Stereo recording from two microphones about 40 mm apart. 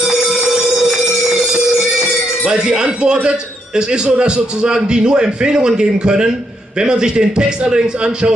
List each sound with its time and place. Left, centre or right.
2.4 s speech: right